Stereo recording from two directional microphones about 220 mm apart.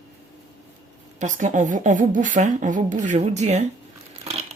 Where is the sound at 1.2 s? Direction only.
35° right (ahead or behind).